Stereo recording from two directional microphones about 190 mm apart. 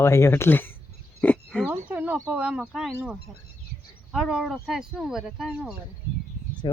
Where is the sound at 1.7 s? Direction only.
10° right (ahead or behind).